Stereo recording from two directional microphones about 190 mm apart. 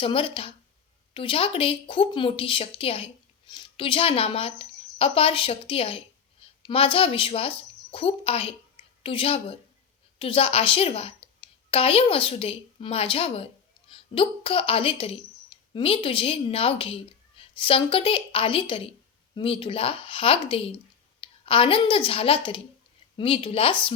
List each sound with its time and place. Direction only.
0.0 s a woman's voice: 30° left (ahead or behind)